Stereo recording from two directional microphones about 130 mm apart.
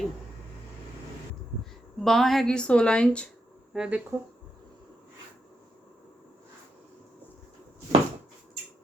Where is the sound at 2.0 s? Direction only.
Centre (ahead or behind).